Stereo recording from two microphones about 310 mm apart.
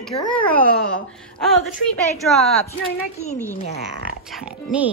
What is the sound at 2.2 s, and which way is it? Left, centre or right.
Speech, centre.